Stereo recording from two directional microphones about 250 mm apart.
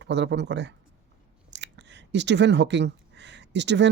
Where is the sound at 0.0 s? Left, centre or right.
Right.